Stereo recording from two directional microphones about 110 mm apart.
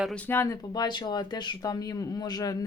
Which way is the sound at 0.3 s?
25° left (ahead or behind).